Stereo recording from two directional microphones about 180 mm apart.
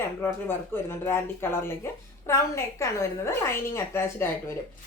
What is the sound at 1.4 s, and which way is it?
A woman's voice, 15° left (ahead or behind).